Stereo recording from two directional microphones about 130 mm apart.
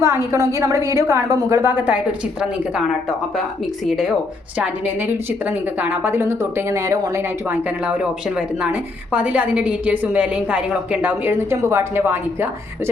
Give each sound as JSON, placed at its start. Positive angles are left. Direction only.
{"t": 0.0, "sound": "a woman's voice", "side_deg": -20}
{"t": 4.5, "sound": "a woman's voice", "side_deg": -15}
{"t": 7.9, "sound": "a woman's voice", "side_deg": -10}